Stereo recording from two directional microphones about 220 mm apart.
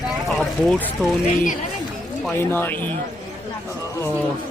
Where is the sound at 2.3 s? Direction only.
10° left (ahead or behind).